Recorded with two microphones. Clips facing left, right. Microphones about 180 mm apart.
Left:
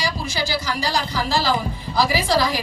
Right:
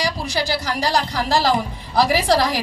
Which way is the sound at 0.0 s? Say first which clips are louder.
Right 2 dB; 70° right (ahead or behind).